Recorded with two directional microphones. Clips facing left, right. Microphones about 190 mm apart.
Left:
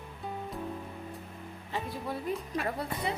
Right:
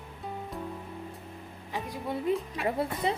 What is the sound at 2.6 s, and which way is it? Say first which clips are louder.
Speech: right 4 dB; 25° right (ahead or behind).